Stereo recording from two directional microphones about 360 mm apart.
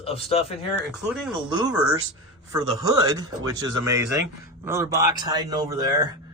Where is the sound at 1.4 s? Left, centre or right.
Centre.